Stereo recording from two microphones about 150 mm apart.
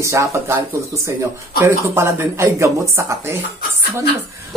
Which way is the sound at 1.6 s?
15° right (ahead or behind).